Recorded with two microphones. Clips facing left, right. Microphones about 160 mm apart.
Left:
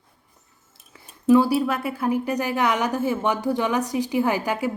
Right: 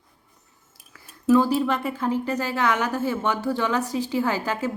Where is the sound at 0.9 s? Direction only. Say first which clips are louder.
Left 2 dB; 15° left (ahead or behind).